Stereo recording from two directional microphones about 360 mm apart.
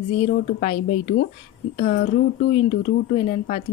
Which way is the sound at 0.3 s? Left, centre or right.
Centre.